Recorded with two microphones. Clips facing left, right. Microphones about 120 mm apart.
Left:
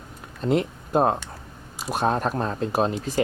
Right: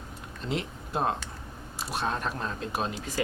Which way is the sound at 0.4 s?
50° left (ahead or behind).